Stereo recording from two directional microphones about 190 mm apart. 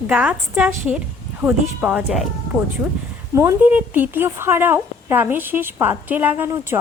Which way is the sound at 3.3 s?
15° right (ahead or behind).